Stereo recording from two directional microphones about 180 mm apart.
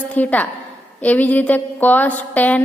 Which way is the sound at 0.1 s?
10° left (ahead or behind).